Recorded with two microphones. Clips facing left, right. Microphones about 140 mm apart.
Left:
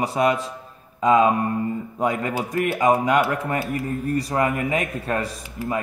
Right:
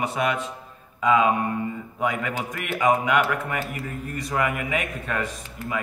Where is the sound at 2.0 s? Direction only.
35° left (ahead or behind).